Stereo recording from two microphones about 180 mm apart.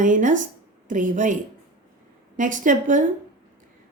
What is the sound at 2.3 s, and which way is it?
Speech, 45° right (ahead or behind).